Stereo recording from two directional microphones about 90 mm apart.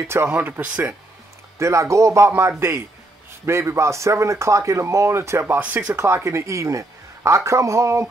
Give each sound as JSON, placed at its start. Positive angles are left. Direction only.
{"t": 0.0, "sound": "speech", "side_deg": -30}
{"t": 0.3, "sound": "speech", "side_deg": -20}
{"t": 1.6, "sound": "speech", "side_deg": -35}
{"t": 3.4, "sound": "speech", "side_deg": -30}